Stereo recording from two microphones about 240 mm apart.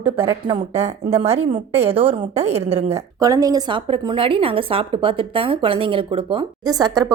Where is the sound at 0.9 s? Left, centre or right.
Right.